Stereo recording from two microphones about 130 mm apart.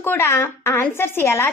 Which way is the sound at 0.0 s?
15° left (ahead or behind).